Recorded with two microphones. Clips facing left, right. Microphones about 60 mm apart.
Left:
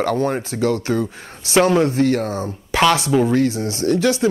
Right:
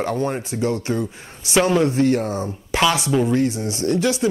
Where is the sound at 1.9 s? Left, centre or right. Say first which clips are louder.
Left 1 dB; left.